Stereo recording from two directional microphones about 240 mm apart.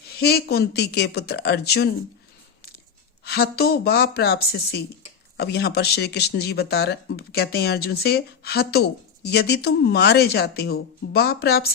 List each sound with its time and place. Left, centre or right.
0.1 s speech: left
3.2 s speech: left